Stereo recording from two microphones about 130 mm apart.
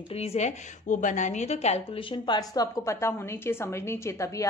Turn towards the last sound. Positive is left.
turn(degrees=25)  # may be behind; listen again after turning